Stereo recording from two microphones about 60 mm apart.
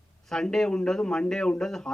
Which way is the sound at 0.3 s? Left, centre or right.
Centre.